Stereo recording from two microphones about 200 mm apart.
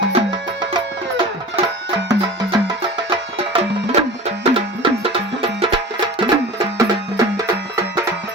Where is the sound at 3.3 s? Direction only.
30° right (ahead or behind).